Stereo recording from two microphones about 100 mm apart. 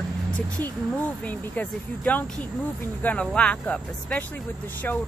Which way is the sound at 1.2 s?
15° left (ahead or behind).